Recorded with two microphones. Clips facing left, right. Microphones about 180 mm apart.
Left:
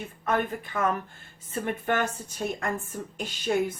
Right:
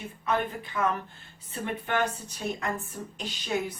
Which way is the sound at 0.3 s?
50° left (ahead or behind).